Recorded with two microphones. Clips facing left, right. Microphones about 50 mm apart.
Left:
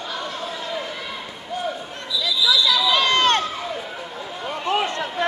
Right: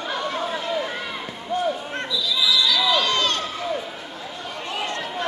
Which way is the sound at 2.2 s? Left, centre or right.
Left.